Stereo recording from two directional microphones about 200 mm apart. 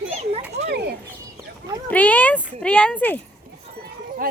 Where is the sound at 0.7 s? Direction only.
55° right (ahead or behind).